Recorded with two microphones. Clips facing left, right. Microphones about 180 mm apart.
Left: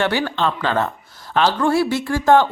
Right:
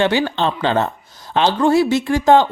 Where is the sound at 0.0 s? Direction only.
20° right (ahead or behind).